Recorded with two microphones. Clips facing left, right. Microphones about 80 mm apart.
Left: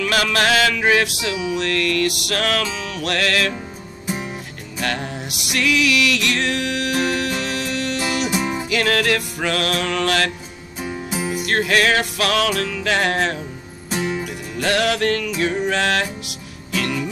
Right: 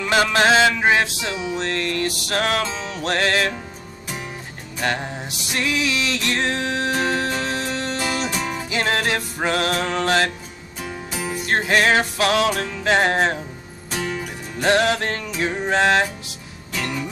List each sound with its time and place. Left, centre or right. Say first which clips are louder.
0.0 s music: right 1 dB; right
4.8 s music: right 1 dB; right
8.3 s music: left 4 dB; centre
8.6 s music: left 2 dB; right
10.8 s music: left 3 dB; centre
11.4 s music: even; right
13.8 s music: left 3 dB; centre
14.2 s music: right 1 dB; right